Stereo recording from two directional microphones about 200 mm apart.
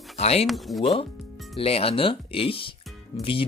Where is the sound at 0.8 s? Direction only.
25° left (ahead or behind).